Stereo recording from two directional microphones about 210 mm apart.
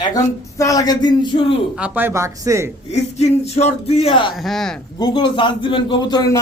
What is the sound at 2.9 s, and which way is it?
A man's voice, 30° left (ahead or behind).